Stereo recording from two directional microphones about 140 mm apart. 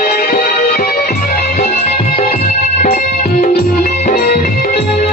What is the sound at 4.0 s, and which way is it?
Music, 80° left.